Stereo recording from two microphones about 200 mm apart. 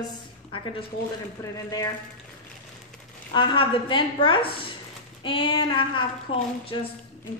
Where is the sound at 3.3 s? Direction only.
25° left (ahead or behind).